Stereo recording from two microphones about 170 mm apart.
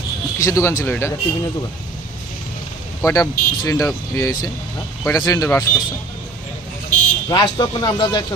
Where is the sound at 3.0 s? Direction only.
20° left (ahead or behind).